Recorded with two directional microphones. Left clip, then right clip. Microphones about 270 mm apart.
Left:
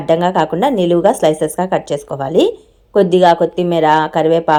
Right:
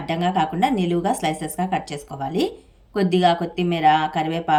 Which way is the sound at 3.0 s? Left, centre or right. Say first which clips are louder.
Left 9 dB; centre.